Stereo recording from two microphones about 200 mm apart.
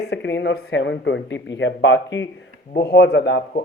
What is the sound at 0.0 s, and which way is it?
Speech, 60° left (ahead or behind).